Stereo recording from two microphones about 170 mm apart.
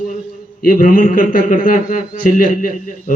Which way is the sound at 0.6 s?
55° left (ahead or behind).